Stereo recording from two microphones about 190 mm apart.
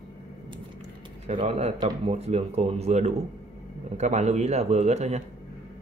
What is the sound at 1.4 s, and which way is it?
Speech, 35° right (ahead or behind).